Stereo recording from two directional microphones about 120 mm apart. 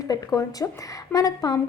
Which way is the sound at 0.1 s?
30° left (ahead or behind).